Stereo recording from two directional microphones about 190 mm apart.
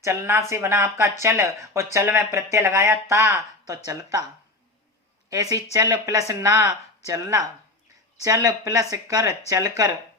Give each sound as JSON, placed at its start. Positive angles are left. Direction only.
{"t": 0.0, "sound": "speech", "side_deg": -15}
{"t": 5.3, "sound": "speech", "side_deg": -15}